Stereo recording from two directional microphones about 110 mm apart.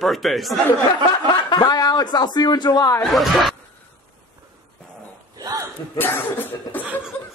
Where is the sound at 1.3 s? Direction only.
40° left (ahead or behind).